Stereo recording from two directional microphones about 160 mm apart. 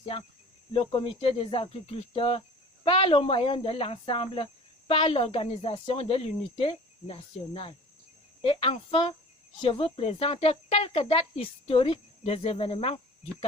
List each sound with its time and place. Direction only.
0.1 s speech: 35° left (ahead or behind)